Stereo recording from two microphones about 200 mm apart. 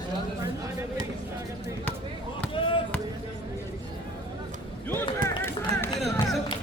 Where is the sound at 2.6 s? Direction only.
25° left (ahead or behind).